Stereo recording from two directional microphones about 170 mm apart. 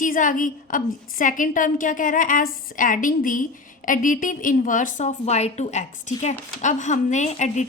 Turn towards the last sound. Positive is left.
turn(degrees=45)  # may be behind; listen again after turning